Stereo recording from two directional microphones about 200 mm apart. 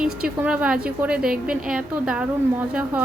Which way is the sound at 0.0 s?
5° right (ahead or behind).